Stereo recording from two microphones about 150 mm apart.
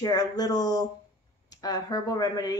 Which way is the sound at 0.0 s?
25° left (ahead or behind).